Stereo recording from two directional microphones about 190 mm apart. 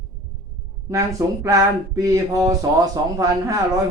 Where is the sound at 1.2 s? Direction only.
15° right (ahead or behind).